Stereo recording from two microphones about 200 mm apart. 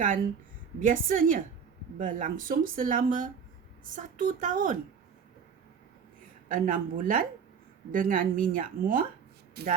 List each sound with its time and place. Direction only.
0.8 s speech: 40° right (ahead or behind)
6.5 s speech: 45° right (ahead or behind)